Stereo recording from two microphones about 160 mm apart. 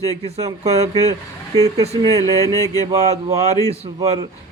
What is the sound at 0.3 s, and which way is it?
Mantra, 40° right (ahead or behind).